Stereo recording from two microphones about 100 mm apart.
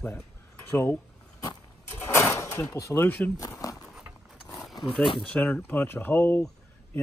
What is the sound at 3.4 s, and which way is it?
Speech, 35° left (ahead or behind).